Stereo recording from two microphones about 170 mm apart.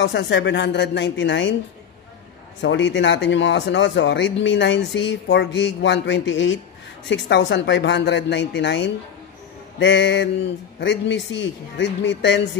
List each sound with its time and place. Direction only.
0.0 s speech: 90° left
2.6 s speech: 90° left